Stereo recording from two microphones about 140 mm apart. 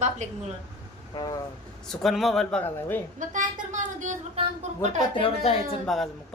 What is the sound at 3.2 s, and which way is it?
A woman's voice, 60° right (ahead or behind).